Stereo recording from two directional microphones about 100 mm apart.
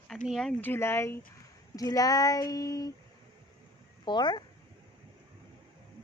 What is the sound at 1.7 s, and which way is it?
Speech, 40° left (ahead or behind).